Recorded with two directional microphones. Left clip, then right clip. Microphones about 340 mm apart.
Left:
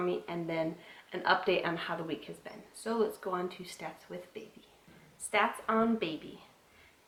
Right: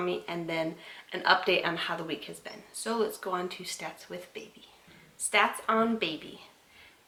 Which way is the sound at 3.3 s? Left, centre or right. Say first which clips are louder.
Right 3 dB; centre.